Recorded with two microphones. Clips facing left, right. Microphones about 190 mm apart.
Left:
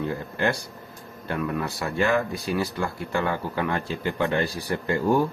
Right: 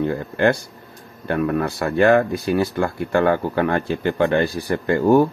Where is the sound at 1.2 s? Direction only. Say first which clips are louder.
Right 7 dB; 55° right (ahead or behind).